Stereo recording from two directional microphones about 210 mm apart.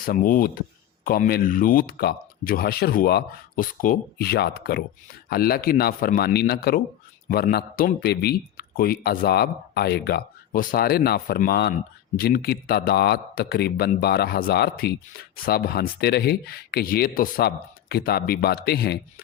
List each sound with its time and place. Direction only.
0.0 s speech: 40° left (ahead or behind)